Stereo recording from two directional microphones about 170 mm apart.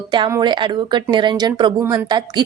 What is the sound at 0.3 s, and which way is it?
A woman's voice, 25° right (ahead or behind).